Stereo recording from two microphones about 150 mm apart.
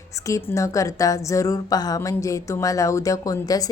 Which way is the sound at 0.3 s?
20° left (ahead or behind).